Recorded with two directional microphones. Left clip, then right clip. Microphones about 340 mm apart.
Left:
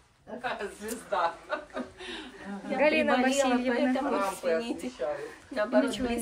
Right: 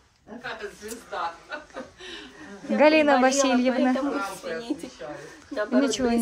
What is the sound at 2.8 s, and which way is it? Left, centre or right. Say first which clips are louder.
Speech: right 7 dB; centre.